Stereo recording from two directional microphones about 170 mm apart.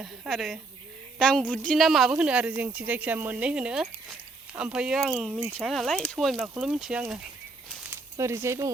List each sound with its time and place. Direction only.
0.0 s speech: centre (ahead or behind)
8.2 s speech: 15° right (ahead or behind)